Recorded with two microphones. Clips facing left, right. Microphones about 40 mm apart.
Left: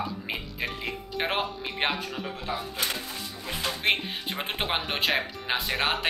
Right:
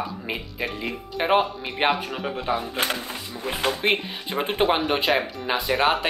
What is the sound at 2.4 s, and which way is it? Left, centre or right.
Speech, right.